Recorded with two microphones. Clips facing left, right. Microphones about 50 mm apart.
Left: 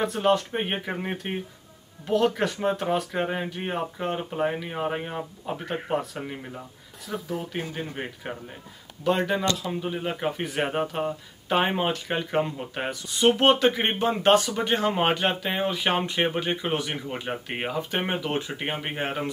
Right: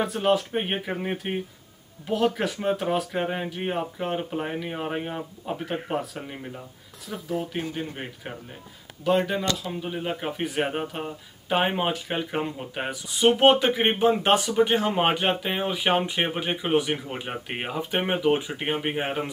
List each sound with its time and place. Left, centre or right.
0.0 s speech: centre
7.1 s speech: centre
7.5 s speech: centre